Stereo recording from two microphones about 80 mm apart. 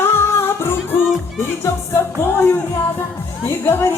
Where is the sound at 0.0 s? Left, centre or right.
Left.